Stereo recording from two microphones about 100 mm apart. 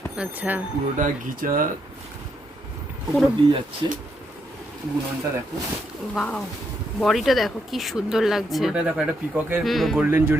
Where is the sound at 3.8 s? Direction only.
45° right (ahead or behind).